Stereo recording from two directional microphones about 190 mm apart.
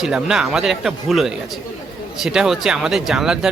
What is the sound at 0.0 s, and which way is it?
Speech, 5° right (ahead or behind).